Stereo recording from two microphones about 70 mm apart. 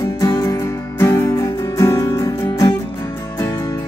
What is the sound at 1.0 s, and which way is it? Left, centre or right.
Music, left.